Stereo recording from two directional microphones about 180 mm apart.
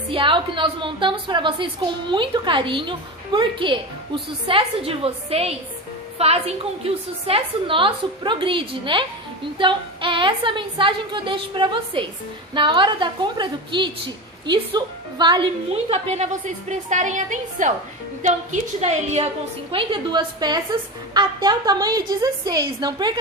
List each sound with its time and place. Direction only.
0.1 s a woman's voice: 25° right (ahead or behind)